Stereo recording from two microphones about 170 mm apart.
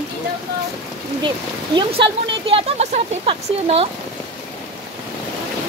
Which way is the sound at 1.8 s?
30° right (ahead or behind).